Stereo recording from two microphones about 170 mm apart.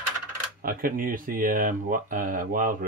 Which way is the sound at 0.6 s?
55° right (ahead or behind).